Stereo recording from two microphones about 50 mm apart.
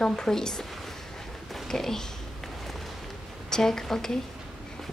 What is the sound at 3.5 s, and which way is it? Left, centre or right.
Speech, centre.